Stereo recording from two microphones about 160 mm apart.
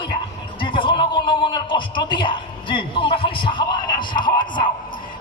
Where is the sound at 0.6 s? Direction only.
30° left (ahead or behind).